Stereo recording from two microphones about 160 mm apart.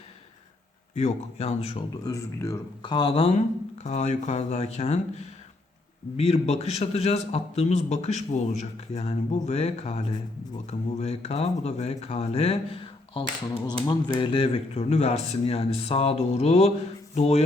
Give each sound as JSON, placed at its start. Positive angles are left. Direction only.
{"t": 0.9, "sound": "speech", "side_deg": 40}
{"t": 2.0, "sound": "speech", "side_deg": 20}
{"t": 2.8, "sound": "a man's voice", "side_deg": 30}